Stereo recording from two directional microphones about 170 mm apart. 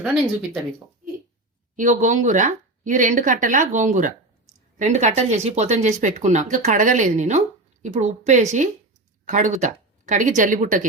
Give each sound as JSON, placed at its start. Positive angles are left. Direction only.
{"t": 0.0, "sound": "speech", "side_deg": -5}
{"t": 1.7, "sound": "speech", "side_deg": -50}